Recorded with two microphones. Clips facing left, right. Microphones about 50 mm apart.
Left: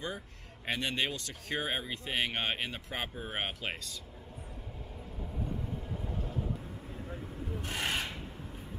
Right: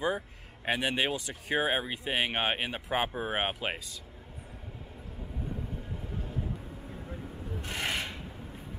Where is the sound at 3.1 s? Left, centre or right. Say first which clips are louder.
Right 7 dB; right.